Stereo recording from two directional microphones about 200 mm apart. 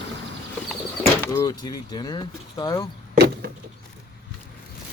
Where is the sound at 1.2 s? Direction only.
20° left (ahead or behind).